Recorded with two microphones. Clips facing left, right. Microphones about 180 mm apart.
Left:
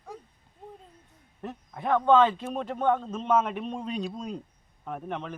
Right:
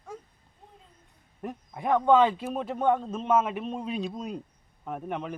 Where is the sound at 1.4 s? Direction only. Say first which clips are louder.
Right 1 dB; 10° right (ahead or behind).